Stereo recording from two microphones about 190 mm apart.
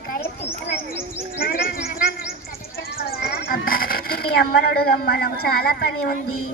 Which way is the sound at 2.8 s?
55° left (ahead or behind).